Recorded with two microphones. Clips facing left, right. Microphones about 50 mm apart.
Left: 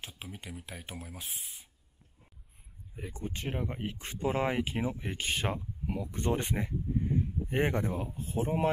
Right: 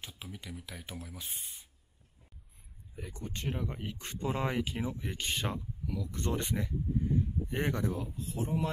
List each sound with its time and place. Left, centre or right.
0.0 s speech: left
3.1 s speech: centre
4.0 s speech: centre; by 8.6 s left